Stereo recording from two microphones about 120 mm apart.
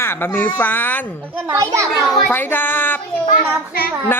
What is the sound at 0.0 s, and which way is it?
Speech, 20° left (ahead or behind).